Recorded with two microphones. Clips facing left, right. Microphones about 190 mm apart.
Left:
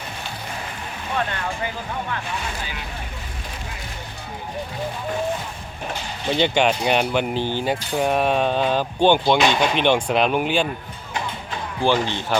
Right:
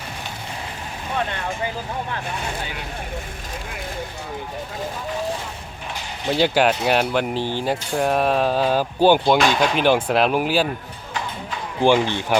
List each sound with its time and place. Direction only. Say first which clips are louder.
6.2 s speech: right 1 dB; 5° right (ahead or behind)
11.8 s speech: right 4 dB; 20° right (ahead or behind)